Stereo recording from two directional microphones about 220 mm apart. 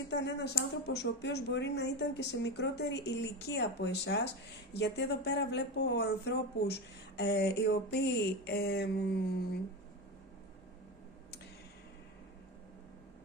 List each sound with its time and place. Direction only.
0.1 s speech: 50° left (ahead or behind)